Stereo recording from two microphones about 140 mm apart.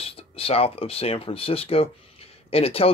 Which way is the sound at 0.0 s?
45° left (ahead or behind).